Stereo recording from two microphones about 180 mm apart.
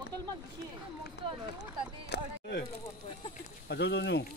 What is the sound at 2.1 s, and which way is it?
Music, 70° left (ahead or behind).